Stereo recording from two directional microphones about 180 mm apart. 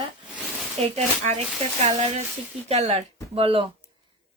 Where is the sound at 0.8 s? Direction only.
35° right (ahead or behind).